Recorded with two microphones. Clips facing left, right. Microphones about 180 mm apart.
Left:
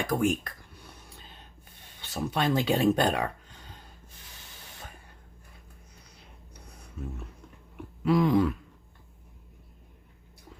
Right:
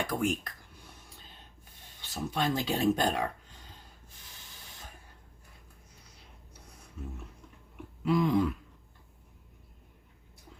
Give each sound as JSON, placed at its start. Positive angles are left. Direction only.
{"t": 0.1, "sound": "speech", "side_deg": 55}
{"t": 2.0, "sound": "speech", "side_deg": 65}
{"t": 8.0, "sound": "speech", "side_deg": 70}